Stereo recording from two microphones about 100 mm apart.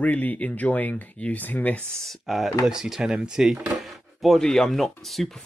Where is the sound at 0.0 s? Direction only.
15° left (ahead or behind).